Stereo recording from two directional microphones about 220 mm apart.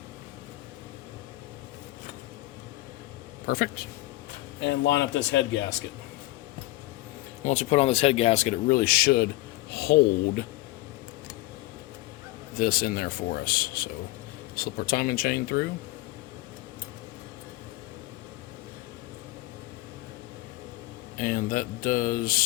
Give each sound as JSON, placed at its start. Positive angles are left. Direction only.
{"t": 3.4, "sound": "speech", "side_deg": 45}
{"t": 4.6, "sound": "speech", "side_deg": 55}
{"t": 7.4, "sound": "speech", "side_deg": 30}
{"t": 12.5, "sound": "speech", "side_deg": 40}
{"t": 21.2, "sound": "speech", "side_deg": 35}